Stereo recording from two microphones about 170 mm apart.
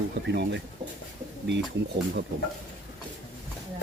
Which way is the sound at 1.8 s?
90° right.